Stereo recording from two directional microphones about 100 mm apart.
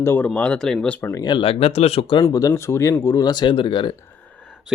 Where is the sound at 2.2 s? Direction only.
35° left (ahead or behind).